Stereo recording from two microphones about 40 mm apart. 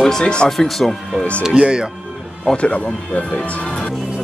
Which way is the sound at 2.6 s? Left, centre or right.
Left.